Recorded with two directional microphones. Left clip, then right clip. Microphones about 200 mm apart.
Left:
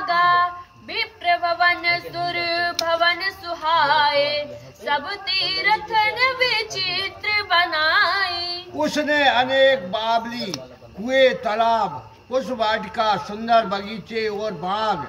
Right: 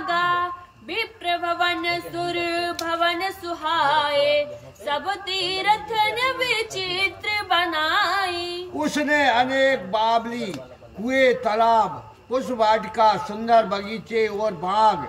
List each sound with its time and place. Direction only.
0.0 s music: 5° left (ahead or behind)
0.9 s a sound: 10° left (ahead or behind)
8.7 s a man's voice: 10° right (ahead or behind)